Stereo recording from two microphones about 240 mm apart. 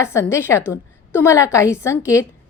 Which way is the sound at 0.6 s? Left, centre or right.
Centre.